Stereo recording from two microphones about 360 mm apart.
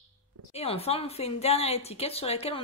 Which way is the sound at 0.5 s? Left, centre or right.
Centre.